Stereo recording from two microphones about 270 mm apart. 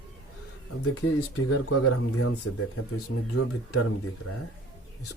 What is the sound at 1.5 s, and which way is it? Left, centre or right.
Speech, left.